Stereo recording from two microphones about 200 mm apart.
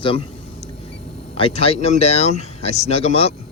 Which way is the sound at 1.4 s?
30° left (ahead or behind).